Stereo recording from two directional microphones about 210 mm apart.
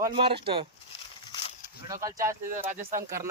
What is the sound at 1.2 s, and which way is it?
Livestock, 25° left (ahead or behind).